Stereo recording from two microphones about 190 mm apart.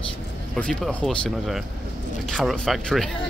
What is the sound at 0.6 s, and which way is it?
Speech, 5° left (ahead or behind).